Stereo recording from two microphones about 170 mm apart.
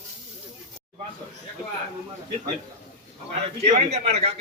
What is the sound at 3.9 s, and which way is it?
Speech, 35° right (ahead or behind).